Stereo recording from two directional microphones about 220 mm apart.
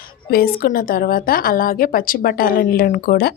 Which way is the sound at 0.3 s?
45° left (ahead or behind).